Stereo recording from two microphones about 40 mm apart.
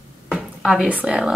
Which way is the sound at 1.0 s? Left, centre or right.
Right.